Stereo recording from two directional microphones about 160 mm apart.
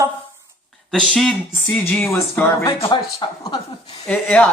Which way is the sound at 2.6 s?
30° left (ahead or behind).